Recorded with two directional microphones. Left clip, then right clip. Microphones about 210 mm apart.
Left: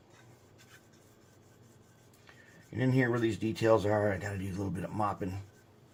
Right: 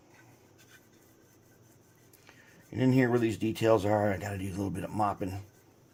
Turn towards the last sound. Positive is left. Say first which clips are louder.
# right 3 dB
turn(degrees=-50)  # may be behind; listen again after turning